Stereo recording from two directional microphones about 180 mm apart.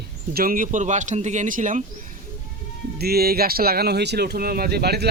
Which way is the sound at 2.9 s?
60° right (ahead or behind).